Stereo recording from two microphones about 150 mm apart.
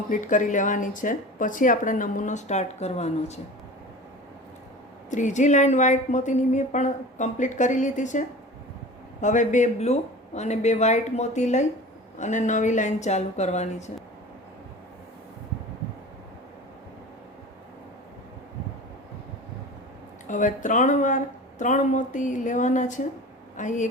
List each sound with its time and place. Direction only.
0.1 s speech: 60° left (ahead or behind)
5.1 s a woman's voice: 55° left (ahead or behind)
9.2 s a woman's voice: 55° left (ahead or behind)
20.2 s speech: 60° left (ahead or behind)